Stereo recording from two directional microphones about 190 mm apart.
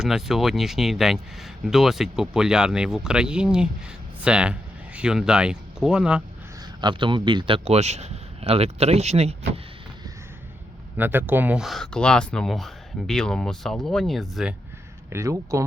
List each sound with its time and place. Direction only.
0.0 s speech: centre (ahead or behind)
6.8 s speech: 25° right (ahead or behind)
10.9 s speech: 10° right (ahead or behind)
15.1 s speech: 15° right (ahead or behind)